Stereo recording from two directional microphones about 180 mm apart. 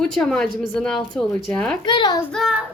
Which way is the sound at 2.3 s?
5° right (ahead or behind).